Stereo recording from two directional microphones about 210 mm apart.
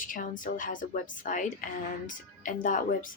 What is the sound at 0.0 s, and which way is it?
Speech, 40° left (ahead or behind).